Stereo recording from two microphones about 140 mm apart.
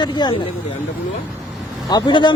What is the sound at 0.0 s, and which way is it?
Speech, 30° left (ahead or behind).